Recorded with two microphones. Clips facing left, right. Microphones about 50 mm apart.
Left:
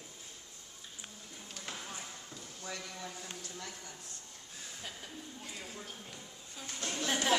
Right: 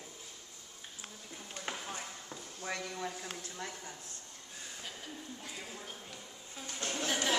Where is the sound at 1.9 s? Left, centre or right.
Right.